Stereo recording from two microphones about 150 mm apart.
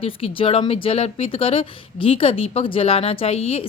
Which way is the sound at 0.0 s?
35° left (ahead or behind).